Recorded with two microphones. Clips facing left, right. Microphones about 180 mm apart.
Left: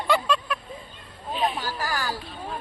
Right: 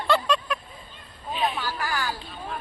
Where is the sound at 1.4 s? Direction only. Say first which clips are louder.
Even; 40° left (ahead or behind).